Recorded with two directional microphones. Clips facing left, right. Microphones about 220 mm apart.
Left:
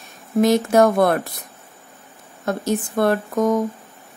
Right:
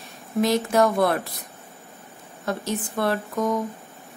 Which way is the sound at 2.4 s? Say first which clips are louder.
Left 5 dB; 45° left (ahead or behind).